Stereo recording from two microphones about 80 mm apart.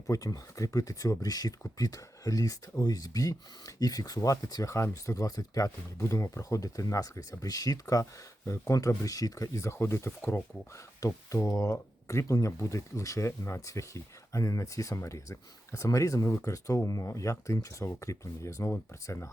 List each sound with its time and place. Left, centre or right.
0.1 s speech: left
4.7 s speech: left
11.0 s speech: left